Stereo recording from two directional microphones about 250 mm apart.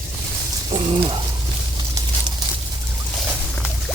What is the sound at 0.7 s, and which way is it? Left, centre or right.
Speech, right.